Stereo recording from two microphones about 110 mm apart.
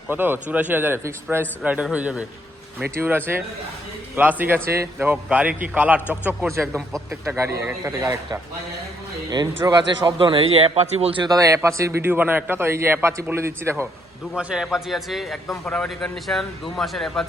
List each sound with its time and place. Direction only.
0.1 s a man's voice: 20° right (ahead or behind)
6.7 s a man's voice: 5° left (ahead or behind)
7.3 s a man's voice: 25° right (ahead or behind)
9.6 s a man's voice: 40° right (ahead or behind); by 11.2 s 65° right (ahead or behind)
11.2 s a man's voice: 35° right (ahead or behind)
14.3 s a man's voice: 5° right (ahead or behind)